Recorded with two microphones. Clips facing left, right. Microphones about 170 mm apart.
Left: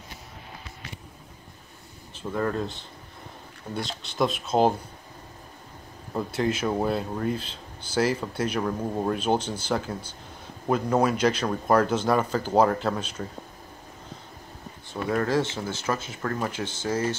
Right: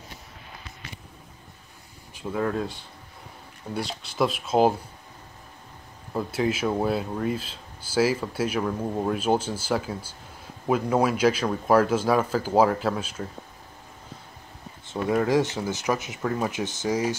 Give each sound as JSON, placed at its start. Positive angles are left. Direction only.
{"t": 2.1, "sound": "speech", "side_deg": -5}
{"t": 6.1, "sound": "speech", "side_deg": -5}
{"t": 14.9, "sound": "speech", "side_deg": -15}